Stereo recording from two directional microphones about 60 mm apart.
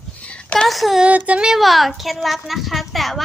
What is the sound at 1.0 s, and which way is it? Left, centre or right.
Speech, right.